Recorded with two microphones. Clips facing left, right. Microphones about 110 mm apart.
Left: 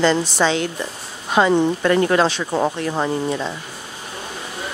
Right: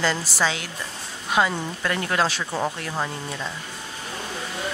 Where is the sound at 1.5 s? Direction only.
25° left (ahead or behind).